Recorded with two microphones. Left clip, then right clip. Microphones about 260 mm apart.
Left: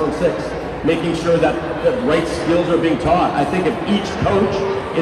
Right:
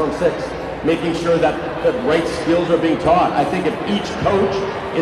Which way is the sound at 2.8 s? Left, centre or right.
Right.